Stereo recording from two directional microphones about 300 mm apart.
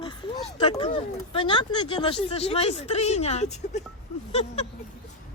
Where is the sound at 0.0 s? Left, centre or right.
Centre.